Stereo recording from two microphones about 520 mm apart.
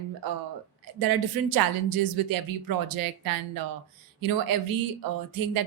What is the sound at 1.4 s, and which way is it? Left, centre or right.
A woman's voice, right.